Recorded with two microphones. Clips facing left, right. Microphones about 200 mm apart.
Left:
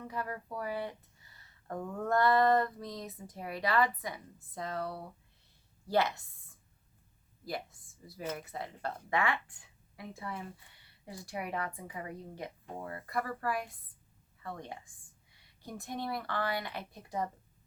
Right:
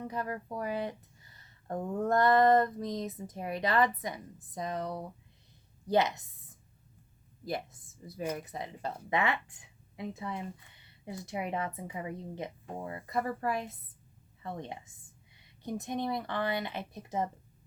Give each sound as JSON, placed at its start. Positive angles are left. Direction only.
{"t": 0.0, "sound": "a woman's voice", "side_deg": -20}